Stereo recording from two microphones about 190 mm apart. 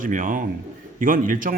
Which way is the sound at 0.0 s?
45° right (ahead or behind).